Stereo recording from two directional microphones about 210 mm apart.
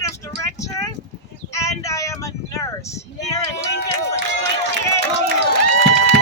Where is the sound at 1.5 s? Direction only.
15° left (ahead or behind).